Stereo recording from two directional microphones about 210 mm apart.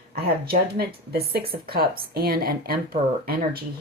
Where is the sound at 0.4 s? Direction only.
45° right (ahead or behind).